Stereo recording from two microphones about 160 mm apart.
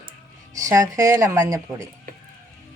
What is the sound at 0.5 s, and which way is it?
Speech, 20° right (ahead or behind).